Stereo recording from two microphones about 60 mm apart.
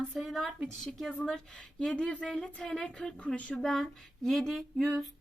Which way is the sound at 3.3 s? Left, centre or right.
Left.